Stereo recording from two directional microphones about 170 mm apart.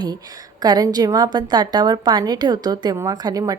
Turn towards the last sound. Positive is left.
turn(degrees=-20)  # may be behind; listen again after turning